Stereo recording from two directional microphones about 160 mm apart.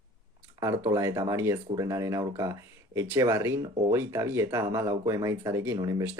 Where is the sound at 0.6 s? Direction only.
20° right (ahead or behind).